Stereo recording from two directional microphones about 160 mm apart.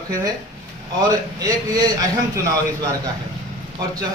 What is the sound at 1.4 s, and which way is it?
Speech, 25° right (ahead or behind).